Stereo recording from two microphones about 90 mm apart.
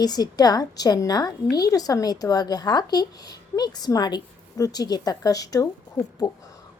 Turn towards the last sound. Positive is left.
turn(degrees=50)  # may be behind; listen again after turning